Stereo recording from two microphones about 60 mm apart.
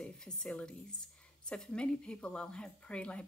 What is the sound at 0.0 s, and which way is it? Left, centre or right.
A woman's voice, centre.